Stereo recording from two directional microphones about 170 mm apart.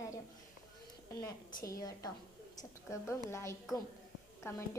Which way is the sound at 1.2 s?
20° left (ahead or behind).